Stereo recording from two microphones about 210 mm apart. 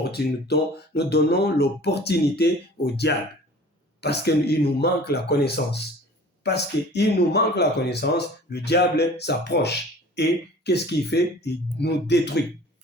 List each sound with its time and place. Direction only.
0.0 s speech: 50° left (ahead or behind)